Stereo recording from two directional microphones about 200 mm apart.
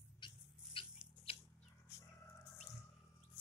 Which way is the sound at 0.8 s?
25° left (ahead or behind).